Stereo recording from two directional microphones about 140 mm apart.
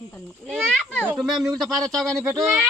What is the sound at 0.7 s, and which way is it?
A child's voice, 5° left (ahead or behind).